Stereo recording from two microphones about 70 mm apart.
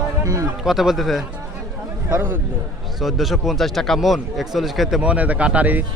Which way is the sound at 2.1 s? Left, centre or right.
Right.